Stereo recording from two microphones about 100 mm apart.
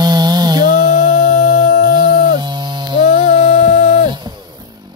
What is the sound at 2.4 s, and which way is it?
Music, 50° right (ahead or behind).